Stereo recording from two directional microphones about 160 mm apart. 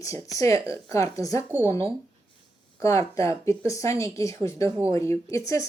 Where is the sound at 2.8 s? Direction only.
20° left (ahead or behind).